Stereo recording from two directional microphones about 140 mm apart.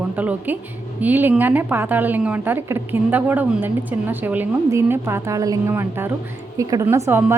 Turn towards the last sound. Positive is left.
turn(degrees=-15)  # may be behind; listen again after turning